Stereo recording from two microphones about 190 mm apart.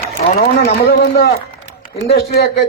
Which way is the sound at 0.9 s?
55° left (ahead or behind).